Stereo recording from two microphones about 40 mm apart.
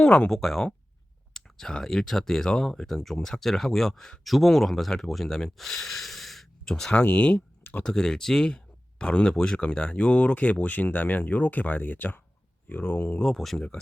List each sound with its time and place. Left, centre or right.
0.0 s speech: left
0.3 s speech: centre
1.3 s clicking: centre
1.8 s speech: centre
7.2 s speech: left
7.9 s speech: centre
8.4 s a sound: left
9.3 s speech: centre; by 13.0 s left
13.2 s speech: centre